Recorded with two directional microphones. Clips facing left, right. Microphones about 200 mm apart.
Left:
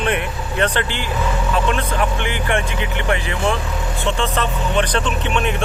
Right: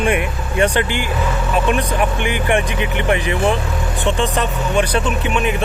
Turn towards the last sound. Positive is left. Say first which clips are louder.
# right 2 dB
turn(degrees=-5)  # may be behind; listen again after turning